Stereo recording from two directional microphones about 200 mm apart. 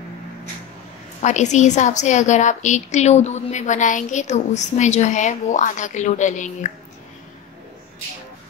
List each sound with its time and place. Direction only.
1.2 s a woman's voice: 35° left (ahead or behind)